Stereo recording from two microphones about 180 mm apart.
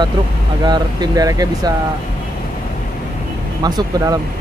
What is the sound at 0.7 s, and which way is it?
Speech, 20° right (ahead or behind).